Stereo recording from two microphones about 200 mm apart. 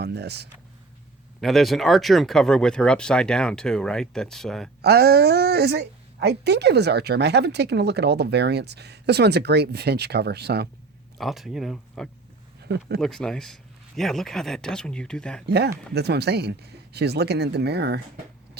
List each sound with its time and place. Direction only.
0.0 s a sound: 55° right (ahead or behind)
1.4 s speech: centre (ahead or behind)
4.8 s a woman's voice: 50° right (ahead or behind)
11.2 s speech: centre (ahead or behind)
12.6 s speech: 55° right (ahead or behind)
13.0 s speech: 5° left (ahead or behind)
15.4 s a woman's voice: 55° right (ahead or behind)